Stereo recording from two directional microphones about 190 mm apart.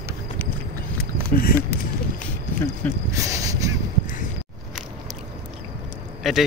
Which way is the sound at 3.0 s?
15° right (ahead or behind).